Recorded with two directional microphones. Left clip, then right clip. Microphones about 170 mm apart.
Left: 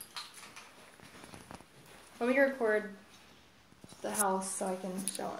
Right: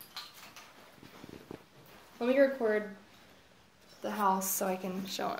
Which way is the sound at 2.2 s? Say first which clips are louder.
Right 2 dB; 35° right (ahead or behind).